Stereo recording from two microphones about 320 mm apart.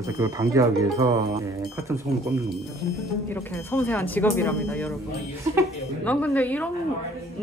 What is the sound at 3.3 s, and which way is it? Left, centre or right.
Speech, centre.